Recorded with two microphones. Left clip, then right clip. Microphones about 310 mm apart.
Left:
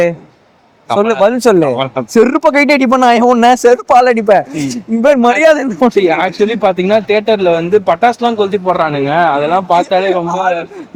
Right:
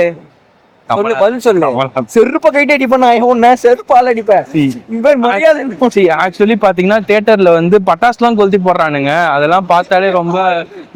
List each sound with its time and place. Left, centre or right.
0.9 s a man's voice: left
1.7 s speech: right
2.1 s speech: left
3.8 s speech: left
5.0 s a man's voice: left
6.0 s speech: right